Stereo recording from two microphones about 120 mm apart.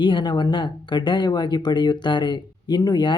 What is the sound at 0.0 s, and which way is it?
Speech, 40° left (ahead or behind).